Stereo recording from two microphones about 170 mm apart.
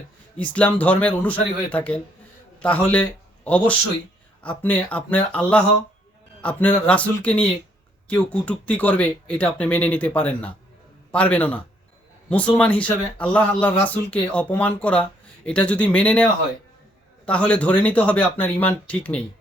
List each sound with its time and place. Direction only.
0.3 s a man's voice: 10° left (ahead or behind)